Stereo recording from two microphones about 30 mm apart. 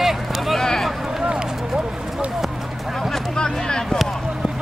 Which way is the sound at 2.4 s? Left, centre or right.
Centre.